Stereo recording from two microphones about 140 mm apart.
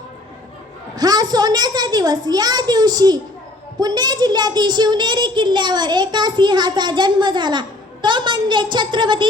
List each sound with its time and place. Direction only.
0.9 s a child's voice: 30° right (ahead or behind)